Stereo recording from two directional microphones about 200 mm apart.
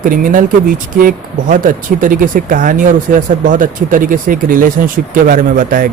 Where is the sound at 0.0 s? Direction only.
45° right (ahead or behind).